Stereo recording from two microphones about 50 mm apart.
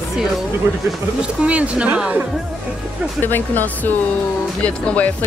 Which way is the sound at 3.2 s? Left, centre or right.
Left.